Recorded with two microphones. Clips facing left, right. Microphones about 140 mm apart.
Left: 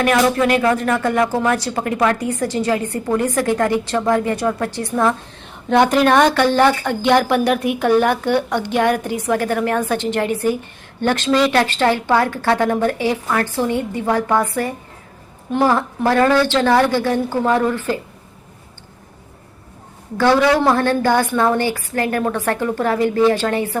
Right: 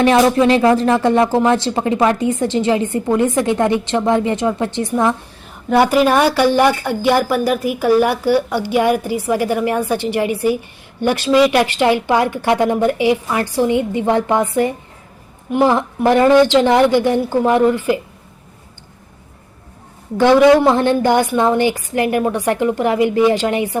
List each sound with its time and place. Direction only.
0.0 s speech: 25° right (ahead or behind)
5.6 s speech: 5° right (ahead or behind)
20.1 s speech: 15° right (ahead or behind)